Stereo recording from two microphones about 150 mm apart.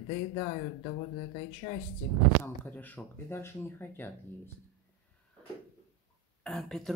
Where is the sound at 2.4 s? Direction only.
15° left (ahead or behind).